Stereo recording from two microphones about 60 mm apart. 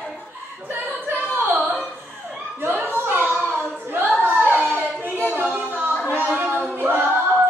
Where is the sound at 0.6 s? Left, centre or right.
Right.